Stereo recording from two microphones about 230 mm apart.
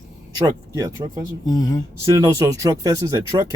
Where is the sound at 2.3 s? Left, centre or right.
Centre.